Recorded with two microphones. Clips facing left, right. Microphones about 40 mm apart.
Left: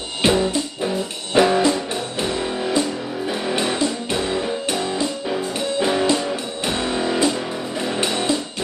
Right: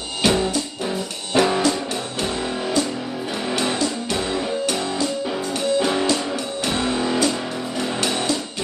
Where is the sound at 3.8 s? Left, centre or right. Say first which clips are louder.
Left 1 dB; left.